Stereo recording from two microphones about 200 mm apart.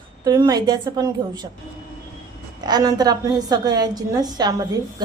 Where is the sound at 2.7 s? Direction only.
20° right (ahead or behind).